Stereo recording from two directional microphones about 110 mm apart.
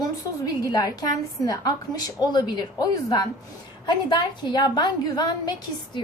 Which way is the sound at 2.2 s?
40° left (ahead or behind).